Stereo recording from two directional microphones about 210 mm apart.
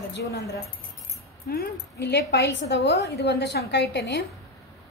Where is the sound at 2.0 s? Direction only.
50° left (ahead or behind).